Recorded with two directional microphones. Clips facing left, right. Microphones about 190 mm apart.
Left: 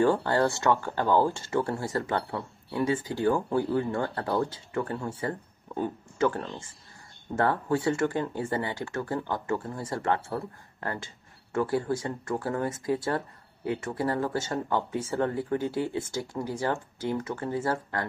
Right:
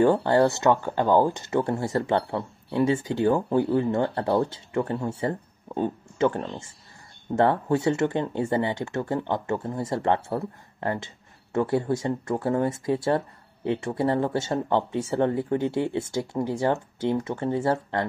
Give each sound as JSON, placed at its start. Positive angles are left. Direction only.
{"t": 0.0, "sound": "speech", "side_deg": -20}